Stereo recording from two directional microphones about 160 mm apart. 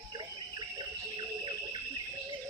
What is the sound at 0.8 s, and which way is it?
Music, 30° right (ahead or behind).